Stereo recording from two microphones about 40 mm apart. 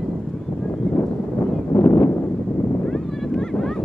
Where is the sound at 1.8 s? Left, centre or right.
Left.